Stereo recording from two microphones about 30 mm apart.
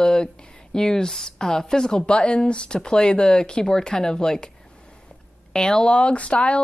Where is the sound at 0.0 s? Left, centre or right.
Left.